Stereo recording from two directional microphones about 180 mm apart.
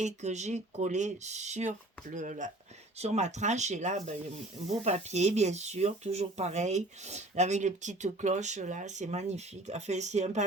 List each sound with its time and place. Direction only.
0.0 s speech: 40° right (ahead or behind)